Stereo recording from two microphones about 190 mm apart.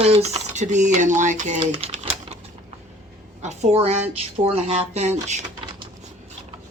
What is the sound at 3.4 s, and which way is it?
A woman's voice, 35° right (ahead or behind).